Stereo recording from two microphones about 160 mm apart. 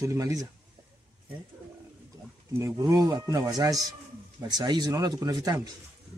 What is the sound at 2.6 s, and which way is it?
Speech, 20° right (ahead or behind).